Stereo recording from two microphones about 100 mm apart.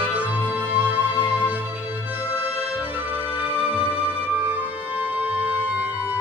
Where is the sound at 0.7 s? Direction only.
15° right (ahead or behind).